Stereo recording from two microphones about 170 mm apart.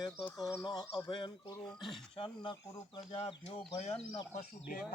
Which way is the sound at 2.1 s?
30° left (ahead or behind).